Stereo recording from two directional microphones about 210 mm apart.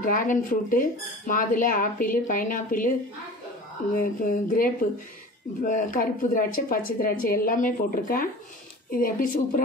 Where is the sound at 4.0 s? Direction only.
40° left (ahead or behind).